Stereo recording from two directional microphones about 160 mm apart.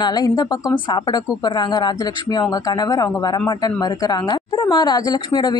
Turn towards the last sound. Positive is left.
turn(degrees=25)  # may be behind; listen again after turning